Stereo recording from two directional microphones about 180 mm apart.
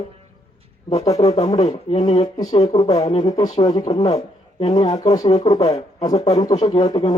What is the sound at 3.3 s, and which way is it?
Speech, 20° left (ahead or behind).